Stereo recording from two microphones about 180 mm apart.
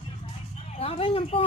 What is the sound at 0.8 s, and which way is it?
Speech, 35° left (ahead or behind).